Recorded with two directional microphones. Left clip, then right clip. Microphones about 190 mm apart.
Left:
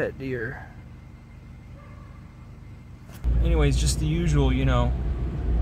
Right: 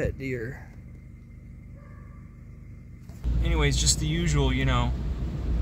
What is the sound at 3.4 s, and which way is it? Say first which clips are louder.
Speech: right 1 dB; centre (ahead or behind).